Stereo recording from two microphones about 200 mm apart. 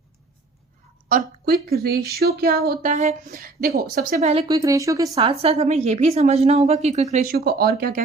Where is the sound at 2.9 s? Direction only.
35° right (ahead or behind).